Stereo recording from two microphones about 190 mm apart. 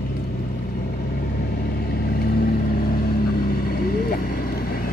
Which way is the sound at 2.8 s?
50° left (ahead or behind).